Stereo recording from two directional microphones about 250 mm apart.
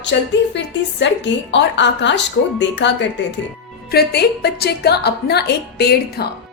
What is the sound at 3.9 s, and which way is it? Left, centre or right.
A woman's voice, left.